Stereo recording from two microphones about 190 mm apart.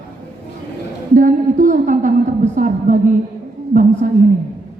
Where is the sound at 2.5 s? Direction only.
45° right (ahead or behind).